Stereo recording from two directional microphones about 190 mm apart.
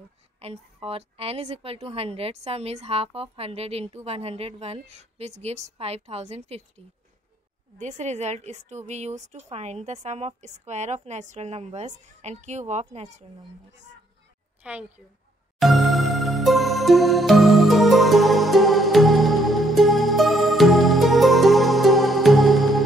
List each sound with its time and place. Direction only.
0.4 s a woman's voice: 30° right (ahead or behind)
7.8 s a woman's voice: 40° right (ahead or behind)
14.6 s a woman's voice: 10° right (ahead or behind)
15.6 s music: centre (ahead or behind)